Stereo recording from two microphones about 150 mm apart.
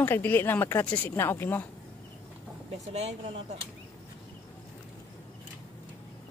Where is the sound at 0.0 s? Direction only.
15° left (ahead or behind).